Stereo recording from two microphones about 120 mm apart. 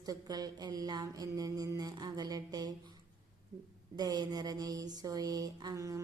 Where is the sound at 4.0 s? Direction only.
35° right (ahead or behind).